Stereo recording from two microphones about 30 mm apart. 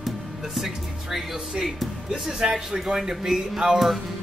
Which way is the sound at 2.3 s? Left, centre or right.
Centre.